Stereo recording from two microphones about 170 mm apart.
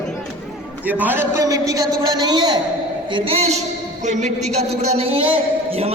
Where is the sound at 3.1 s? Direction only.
35° right (ahead or behind).